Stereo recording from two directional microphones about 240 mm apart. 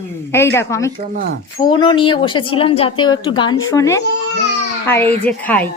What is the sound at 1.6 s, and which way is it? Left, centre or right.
A woman's voice, centre.